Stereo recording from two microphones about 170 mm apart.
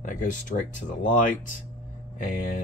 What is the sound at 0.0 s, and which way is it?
Speech, 50° left (ahead or behind).